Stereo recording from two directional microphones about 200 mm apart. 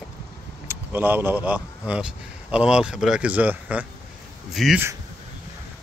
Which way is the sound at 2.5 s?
5° right (ahead or behind).